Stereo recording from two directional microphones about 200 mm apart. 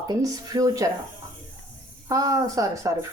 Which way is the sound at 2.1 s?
15° right (ahead or behind).